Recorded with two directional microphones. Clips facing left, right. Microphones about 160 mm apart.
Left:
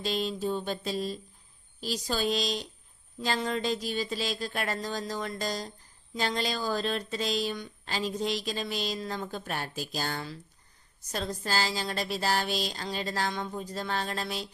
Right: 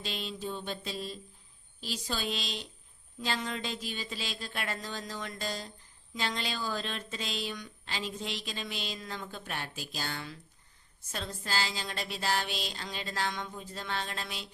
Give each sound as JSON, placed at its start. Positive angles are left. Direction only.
{"t": 0.0, "sound": "a woman's voice", "side_deg": 40}